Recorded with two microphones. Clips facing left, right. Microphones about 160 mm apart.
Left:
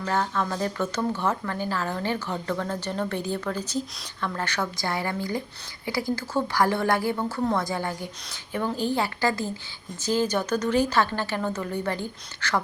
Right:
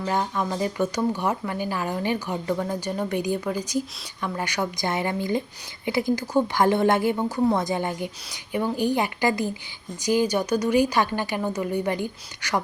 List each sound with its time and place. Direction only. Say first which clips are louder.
0.0 s speech: right 1 dB; 15° right (ahead or behind)